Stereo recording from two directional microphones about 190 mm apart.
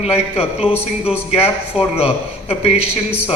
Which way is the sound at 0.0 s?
30° left (ahead or behind).